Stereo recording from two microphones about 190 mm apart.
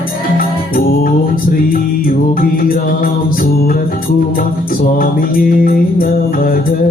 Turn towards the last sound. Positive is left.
turn(degrees=50)  # may be behind; listen again after turning